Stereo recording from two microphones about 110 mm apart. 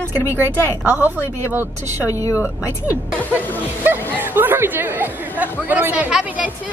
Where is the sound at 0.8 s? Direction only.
10° right (ahead or behind).